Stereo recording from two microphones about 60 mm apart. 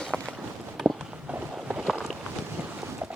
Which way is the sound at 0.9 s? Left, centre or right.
Right.